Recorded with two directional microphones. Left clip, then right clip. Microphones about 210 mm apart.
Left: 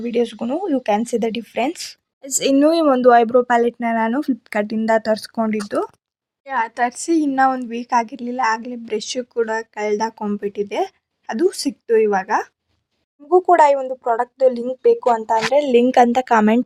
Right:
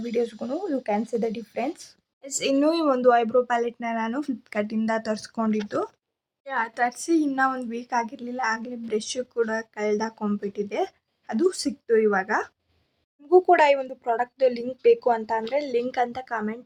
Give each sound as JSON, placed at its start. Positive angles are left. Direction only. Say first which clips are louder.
{"t": 0.0, "sound": "speech", "louder": "left 6 dB", "side_deg": 30}
{"t": 13.3, "sound": "a woman's voice", "louder": "left 5 dB", "side_deg": 10}
{"t": 15.5, "sound": "speech", "louder": "left 13 dB", "side_deg": 30}